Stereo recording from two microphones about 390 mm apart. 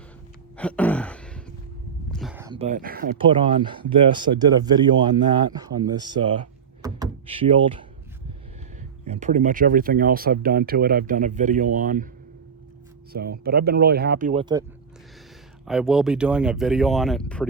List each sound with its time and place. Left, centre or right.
0.5 s a sound: centre
2.0 s speech: centre
6.8 s door: centre
9.0 s speech: centre
13.1 s speech: right
15.6 s speech: centre